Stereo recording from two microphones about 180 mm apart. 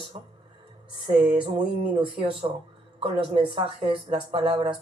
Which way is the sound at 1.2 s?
30° right (ahead or behind).